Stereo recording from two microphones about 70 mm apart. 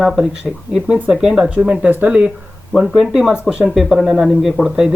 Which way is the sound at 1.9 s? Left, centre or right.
Right.